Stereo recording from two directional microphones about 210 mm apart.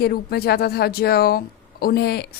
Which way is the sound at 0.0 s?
50° left (ahead or behind).